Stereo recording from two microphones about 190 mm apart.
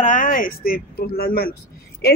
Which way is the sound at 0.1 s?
45° left (ahead or behind).